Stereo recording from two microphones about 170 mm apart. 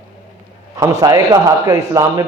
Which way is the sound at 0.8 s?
20° right (ahead or behind).